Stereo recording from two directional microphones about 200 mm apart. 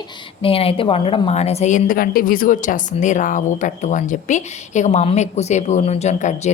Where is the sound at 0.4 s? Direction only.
30° left (ahead or behind).